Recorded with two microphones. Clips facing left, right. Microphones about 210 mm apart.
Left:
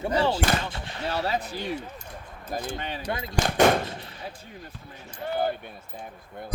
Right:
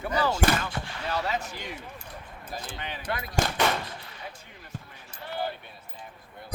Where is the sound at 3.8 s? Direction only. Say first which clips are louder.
Left 5 dB; 25° left (ahead or behind).